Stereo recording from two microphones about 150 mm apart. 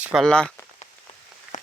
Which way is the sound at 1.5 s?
55° left (ahead or behind).